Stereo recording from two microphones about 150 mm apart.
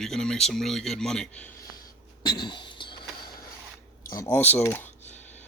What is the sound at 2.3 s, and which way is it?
Cough, 30° left (ahead or behind).